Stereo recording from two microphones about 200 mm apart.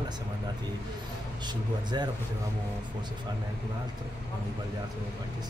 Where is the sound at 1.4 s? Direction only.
20° right (ahead or behind).